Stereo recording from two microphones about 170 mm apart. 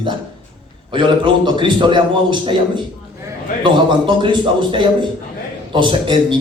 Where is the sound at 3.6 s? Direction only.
30° right (ahead or behind).